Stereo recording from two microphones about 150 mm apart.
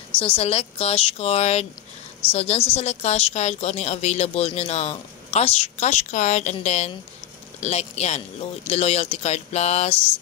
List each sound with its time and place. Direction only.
0.2 s a woman's voice: 40° left (ahead or behind)